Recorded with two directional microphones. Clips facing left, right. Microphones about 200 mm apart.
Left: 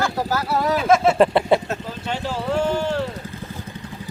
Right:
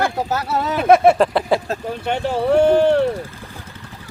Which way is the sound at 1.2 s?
Centre (ahead or behind).